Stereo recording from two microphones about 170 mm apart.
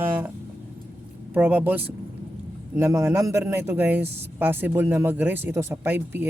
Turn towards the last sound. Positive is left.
turn(degrees=-10)  # may be behind; listen again after turning